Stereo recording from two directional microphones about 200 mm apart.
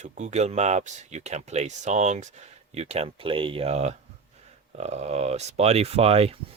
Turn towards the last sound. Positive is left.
turn(degrees=-30)  # may be behind; listen again after turning